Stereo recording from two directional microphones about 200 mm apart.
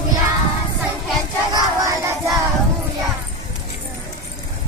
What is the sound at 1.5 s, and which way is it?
Child singing, 15° right (ahead or behind).